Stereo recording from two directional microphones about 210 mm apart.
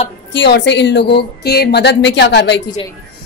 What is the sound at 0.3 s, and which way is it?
A woman's voice, 55° left (ahead or behind).